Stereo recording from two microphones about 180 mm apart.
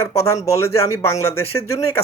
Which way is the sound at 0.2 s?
15° left (ahead or behind).